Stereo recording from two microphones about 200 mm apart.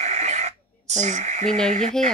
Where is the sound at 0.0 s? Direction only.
35° right (ahead or behind).